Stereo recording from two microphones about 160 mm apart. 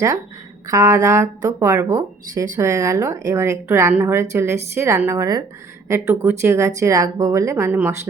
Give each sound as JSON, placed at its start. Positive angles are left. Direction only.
{"t": 0.7, "sound": "speech", "side_deg": -15}
{"t": 6.4, "sound": "speech", "side_deg": -15}